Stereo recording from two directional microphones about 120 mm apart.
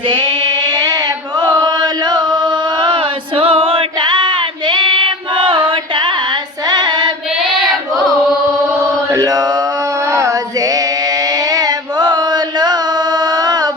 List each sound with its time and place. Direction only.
0.1 s a sound: 40° right (ahead or behind)
6.7 s child singing: 35° right (ahead or behind)
9.0 s chant: 30° right (ahead or behind)
10.1 s female singing: 30° right (ahead or behind)